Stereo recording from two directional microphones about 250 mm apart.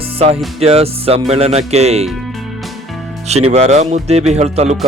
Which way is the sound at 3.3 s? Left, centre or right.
Right.